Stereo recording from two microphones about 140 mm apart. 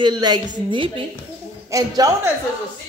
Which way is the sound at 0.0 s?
30° right (ahead or behind).